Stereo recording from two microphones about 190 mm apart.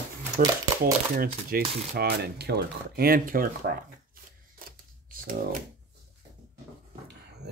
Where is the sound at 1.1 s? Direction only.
50° right (ahead or behind).